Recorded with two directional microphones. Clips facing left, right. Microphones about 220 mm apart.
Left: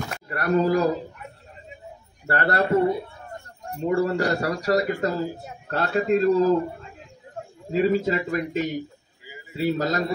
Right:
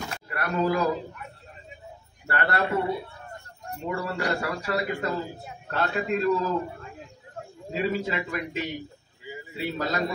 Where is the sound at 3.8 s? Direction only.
45° left (ahead or behind).